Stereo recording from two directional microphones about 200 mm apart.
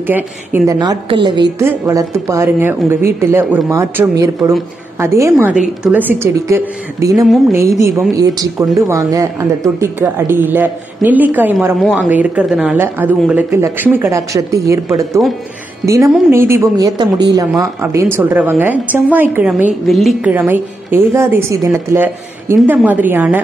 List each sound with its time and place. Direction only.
0.0 s a woman's voice: 10° right (ahead or behind)
0.7 s a woman's voice: 20° right (ahead or behind)
1.6 s a woman's voice: 10° right (ahead or behind)